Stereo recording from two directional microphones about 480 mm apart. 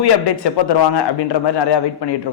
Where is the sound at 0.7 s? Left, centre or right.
Left.